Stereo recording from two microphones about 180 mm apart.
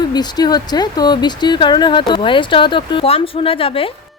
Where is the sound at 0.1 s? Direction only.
20° left (ahead or behind).